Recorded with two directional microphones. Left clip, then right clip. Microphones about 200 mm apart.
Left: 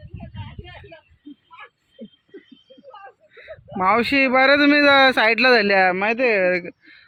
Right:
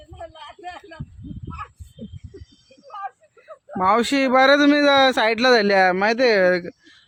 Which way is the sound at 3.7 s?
25° right (ahead or behind).